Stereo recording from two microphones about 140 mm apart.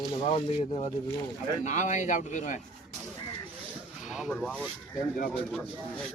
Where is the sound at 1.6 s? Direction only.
60° left (ahead or behind).